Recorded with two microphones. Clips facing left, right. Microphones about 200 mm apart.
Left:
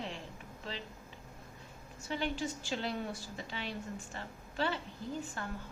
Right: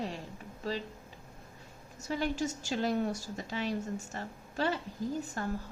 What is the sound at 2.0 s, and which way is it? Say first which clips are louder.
A woman's voice: right 4 dB; 40° right (ahead or behind).